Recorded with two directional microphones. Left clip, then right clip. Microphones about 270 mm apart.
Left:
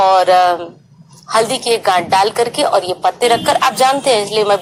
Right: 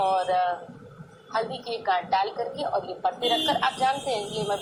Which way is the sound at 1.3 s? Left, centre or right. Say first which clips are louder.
Left 15 dB; left.